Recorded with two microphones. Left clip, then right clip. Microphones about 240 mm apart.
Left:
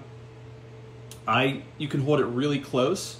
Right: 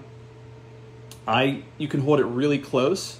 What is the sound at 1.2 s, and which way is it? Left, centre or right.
Speech, centre.